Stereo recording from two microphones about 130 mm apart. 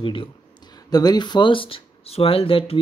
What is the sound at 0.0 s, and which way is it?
Speech, 40° left (ahead or behind).